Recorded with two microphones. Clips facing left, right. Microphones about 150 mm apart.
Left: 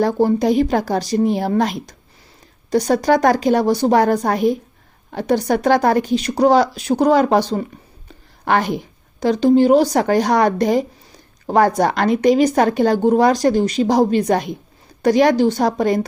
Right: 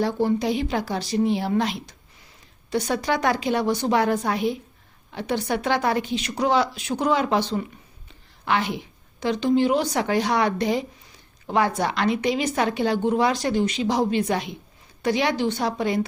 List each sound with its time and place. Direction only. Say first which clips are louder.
0.0 s speech: left 6 dB; 40° left (ahead or behind)